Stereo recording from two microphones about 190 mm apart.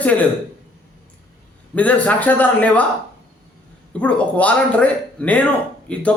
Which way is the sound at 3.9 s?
5° left (ahead or behind).